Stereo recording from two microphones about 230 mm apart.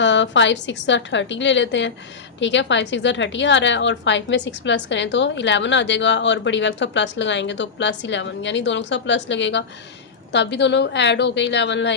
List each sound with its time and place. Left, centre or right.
0.0 s a woman's voice: left